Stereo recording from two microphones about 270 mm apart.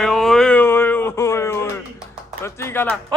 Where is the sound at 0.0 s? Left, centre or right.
Centre.